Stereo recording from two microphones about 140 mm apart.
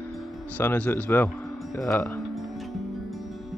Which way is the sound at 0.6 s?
15° left (ahead or behind).